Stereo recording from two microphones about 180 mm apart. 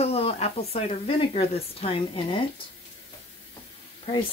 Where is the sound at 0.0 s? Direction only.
35° left (ahead or behind).